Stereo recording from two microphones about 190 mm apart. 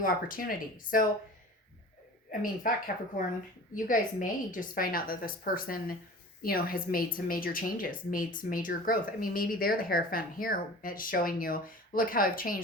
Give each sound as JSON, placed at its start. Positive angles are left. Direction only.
{"t": 0.0, "sound": "speech", "side_deg": 50}
{"t": 2.4, "sound": "speech", "side_deg": 45}